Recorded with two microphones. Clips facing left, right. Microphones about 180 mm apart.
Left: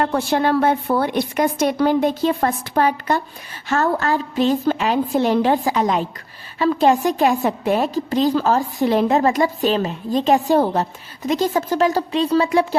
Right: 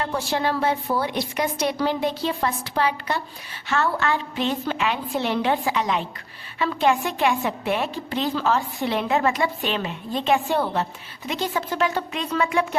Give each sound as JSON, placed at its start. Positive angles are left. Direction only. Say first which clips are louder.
{"t": 0.0, "sound": "a woman's voice", "louder": "left 6 dB", "side_deg": 55}